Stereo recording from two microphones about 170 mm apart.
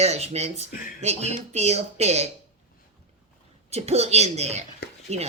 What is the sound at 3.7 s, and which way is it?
Speech, 40° right (ahead or behind).